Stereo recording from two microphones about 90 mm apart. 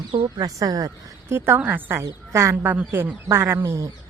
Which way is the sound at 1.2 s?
25° right (ahead or behind).